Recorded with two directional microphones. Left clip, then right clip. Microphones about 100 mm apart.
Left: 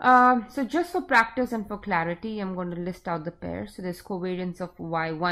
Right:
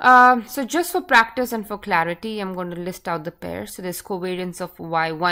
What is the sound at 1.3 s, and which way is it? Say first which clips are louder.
A woman's voice: right 4 dB; 30° right (ahead or behind).